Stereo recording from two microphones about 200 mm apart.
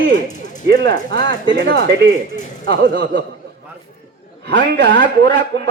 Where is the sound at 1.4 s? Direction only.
65° right (ahead or behind).